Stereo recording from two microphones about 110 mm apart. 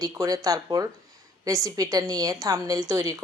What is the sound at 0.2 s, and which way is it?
Speech, 30° right (ahead or behind).